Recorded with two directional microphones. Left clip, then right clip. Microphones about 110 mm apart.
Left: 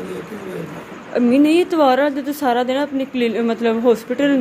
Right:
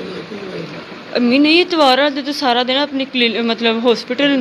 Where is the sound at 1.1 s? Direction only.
25° left (ahead or behind).